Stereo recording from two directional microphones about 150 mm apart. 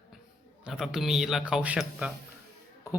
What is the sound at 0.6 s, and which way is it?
Speech, 5° right (ahead or behind).